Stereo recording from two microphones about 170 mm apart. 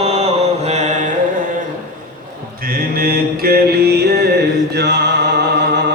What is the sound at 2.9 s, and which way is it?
Music, 60° right (ahead or behind).